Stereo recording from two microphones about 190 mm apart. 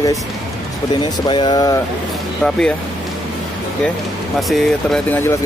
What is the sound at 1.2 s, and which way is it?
Speech, 25° left (ahead or behind).